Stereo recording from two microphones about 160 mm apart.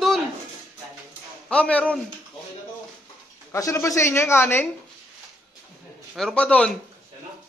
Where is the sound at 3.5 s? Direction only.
20° left (ahead or behind).